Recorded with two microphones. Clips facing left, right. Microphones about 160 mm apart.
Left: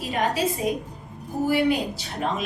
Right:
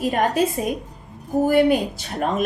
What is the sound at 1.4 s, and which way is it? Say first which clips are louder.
A woman's voice: right 4 dB; 50° right (ahead or behind).